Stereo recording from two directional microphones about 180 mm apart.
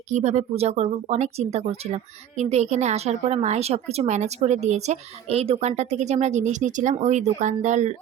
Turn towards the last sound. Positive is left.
turn(degrees=-40)  # may be behind; listen again after turning